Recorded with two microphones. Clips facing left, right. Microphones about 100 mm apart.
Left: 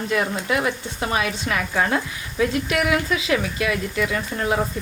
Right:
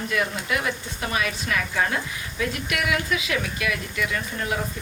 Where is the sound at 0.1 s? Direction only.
30° left (ahead or behind).